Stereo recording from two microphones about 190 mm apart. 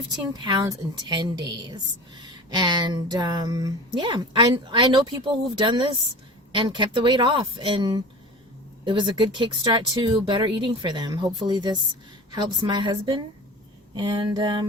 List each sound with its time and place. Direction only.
0.4 s a woman's voice: 20° right (ahead or behind)